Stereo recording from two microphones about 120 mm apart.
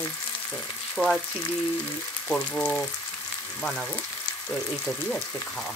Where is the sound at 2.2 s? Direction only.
15° left (ahead or behind).